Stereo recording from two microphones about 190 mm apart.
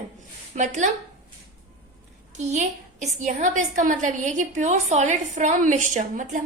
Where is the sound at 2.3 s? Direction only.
40° right (ahead or behind).